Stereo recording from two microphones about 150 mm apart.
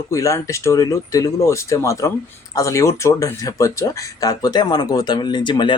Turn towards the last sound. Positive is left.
turn(degrees=30)  # may be behind; listen again after turning